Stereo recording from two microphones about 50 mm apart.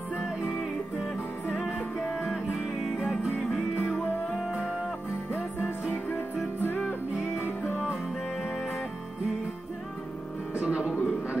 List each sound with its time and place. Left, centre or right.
2.1 s music: centre
6.0 s music: left
10.6 s music: right